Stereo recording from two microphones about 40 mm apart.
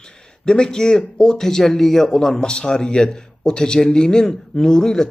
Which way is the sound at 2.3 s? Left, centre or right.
Left.